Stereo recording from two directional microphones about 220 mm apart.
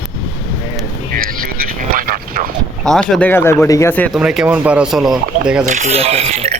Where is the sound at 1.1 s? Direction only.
40° right (ahead or behind).